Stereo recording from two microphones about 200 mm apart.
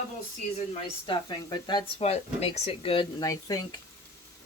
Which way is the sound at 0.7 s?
25° left (ahead or behind).